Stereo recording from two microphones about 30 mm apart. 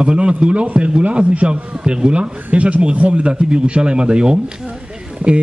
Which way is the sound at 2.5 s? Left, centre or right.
Right.